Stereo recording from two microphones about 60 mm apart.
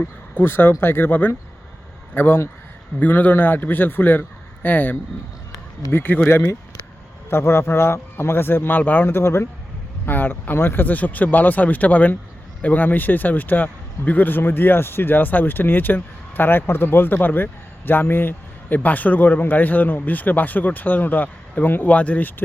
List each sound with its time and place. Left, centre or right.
0.0 s a man's voice: left
9.0 s speech: left
10.1 s a man's voice: left